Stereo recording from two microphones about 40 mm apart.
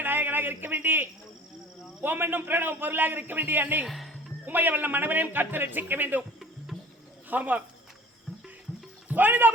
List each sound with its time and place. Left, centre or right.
0.0 s a sound: right
2.0 s a man's voice: right
3.8 s speech: centre
4.4 s a man's voice: right
7.3 s speech: right
9.0 s speech: right